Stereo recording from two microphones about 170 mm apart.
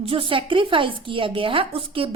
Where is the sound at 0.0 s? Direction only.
35° right (ahead or behind).